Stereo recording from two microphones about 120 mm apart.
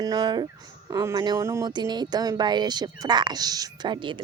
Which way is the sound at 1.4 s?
25° right (ahead or behind).